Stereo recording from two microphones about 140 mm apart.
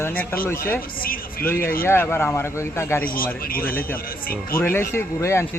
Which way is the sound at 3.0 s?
90° left.